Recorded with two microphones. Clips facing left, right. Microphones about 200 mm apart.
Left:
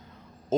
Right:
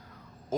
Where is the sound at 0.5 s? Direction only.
25° left (ahead or behind).